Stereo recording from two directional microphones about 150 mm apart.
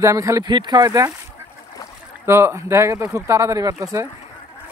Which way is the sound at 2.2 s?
15° right (ahead or behind).